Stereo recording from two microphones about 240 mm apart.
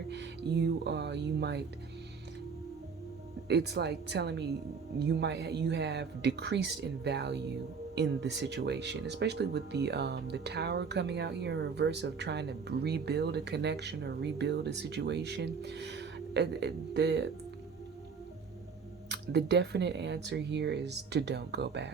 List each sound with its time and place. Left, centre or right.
0.1 s speech: right
3.5 s speech: right
19.0 s speech: right